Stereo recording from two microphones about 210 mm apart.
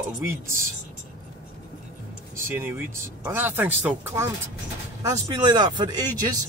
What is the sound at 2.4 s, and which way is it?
Speech, 10° right (ahead or behind).